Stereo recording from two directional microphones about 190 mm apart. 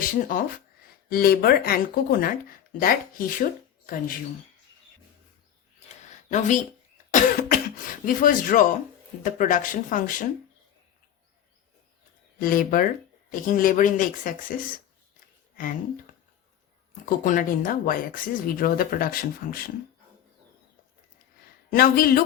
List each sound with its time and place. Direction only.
0.0 s speech: 45° left (ahead or behind)
7.1 s cough: 45° left (ahead or behind)
9.2 s speech: 45° left (ahead or behind)
12.4 s speech: 50° left (ahead or behind)
15.5 s speech: 45° left (ahead or behind)
16.9 s speech: 45° left (ahead or behind)
21.7 s speech: 50° left (ahead or behind)